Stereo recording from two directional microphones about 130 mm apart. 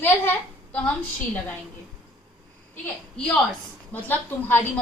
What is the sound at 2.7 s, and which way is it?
A woman's voice, 5° left (ahead or behind).